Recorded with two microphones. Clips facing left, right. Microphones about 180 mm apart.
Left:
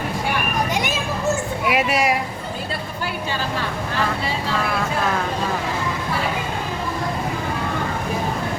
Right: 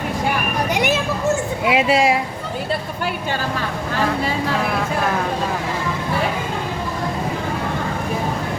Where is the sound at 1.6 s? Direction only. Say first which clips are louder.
Right 4 dB; 25° right (ahead or behind).